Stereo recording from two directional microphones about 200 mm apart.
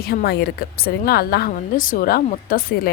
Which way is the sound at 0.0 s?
50° left (ahead or behind).